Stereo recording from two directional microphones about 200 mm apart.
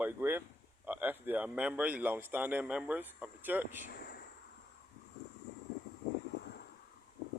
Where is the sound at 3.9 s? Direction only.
50° left (ahead or behind).